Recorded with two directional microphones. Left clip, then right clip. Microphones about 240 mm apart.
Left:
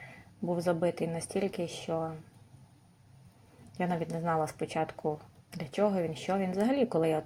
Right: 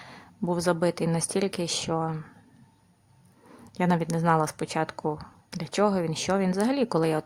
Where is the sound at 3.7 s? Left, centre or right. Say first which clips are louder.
Right 7 dB; centre.